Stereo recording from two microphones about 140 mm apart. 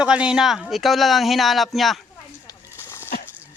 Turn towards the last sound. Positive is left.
turn(degrees=15)  # may be behind; listen again after turning